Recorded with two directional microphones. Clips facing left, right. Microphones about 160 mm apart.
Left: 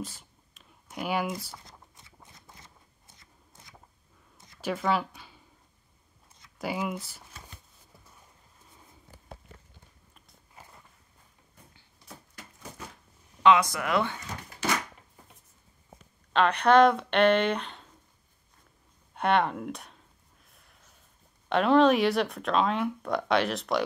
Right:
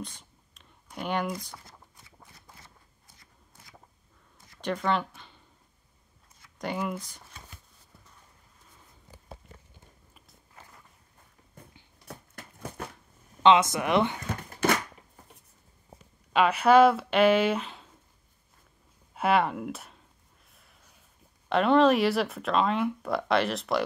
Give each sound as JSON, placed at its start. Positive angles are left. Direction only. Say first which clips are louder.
{"t": 0.6, "sound": "speech", "louder": "left 1 dB", "side_deg": 5}
{"t": 4.6, "sound": "speech", "louder": "even", "side_deg": 5}
{"t": 6.6, "sound": "speech", "louder": "even", "side_deg": 5}
{"t": 12.1, "sound": "a sound", "louder": "right 3 dB", "side_deg": -55}
{"t": 13.4, "sound": "speech", "louder": "right 1 dB", "side_deg": -25}
{"t": 14.6, "sound": "a sound", "louder": "right 4 dB", "side_deg": -50}
{"t": 16.3, "sound": "speech", "louder": "right 1 dB", "side_deg": -5}
{"t": 19.1, "sound": "speech", "louder": "right 1 dB", "side_deg": -5}
{"t": 20.4, "sound": "a sound", "louder": "right 1 dB", "side_deg": 0}
{"t": 21.5, "sound": "speech", "louder": "even", "side_deg": 0}